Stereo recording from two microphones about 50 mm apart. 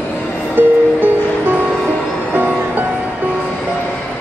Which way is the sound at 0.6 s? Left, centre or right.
Right.